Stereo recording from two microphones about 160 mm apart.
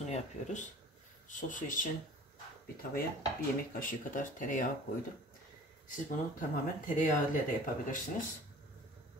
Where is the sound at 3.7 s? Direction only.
55° left (ahead or behind).